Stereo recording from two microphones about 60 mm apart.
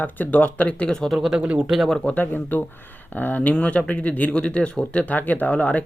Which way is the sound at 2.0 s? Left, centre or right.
Left.